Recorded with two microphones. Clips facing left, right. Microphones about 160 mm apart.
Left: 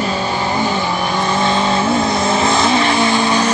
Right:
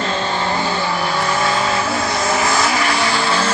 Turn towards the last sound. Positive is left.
turn(degrees=15)  # may be behind; listen again after turning